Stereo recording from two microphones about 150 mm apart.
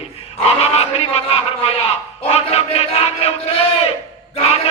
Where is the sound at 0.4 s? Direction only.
45° left (ahead or behind).